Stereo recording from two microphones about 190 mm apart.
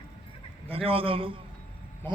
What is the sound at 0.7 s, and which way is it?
Speech, 30° right (ahead or behind).